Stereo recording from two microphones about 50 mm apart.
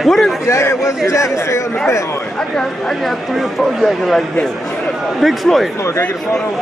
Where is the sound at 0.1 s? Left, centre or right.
Centre.